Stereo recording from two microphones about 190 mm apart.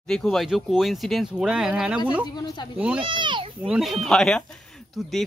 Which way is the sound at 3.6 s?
Centre (ahead or behind).